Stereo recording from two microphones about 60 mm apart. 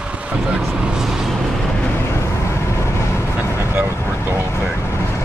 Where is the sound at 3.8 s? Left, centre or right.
Right.